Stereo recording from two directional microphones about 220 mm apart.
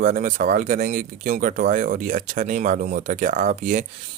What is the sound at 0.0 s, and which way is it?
Speech, 35° right (ahead or behind).